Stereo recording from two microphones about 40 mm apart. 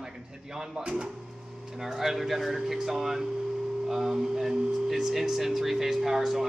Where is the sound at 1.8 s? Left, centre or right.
Centre.